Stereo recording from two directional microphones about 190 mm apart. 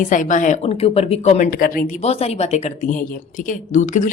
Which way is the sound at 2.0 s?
30° left (ahead or behind).